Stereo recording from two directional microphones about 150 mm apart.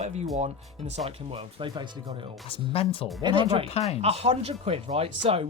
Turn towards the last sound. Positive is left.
turn(degrees=-40)  # may be behind; listen again after turning